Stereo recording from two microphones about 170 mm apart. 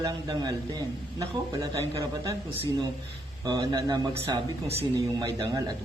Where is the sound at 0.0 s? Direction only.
25° right (ahead or behind).